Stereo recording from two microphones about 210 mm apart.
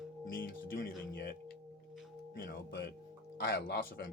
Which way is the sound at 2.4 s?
45° left (ahead or behind).